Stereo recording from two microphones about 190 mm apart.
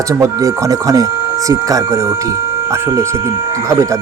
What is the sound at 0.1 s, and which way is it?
Speech, 15° right (ahead or behind).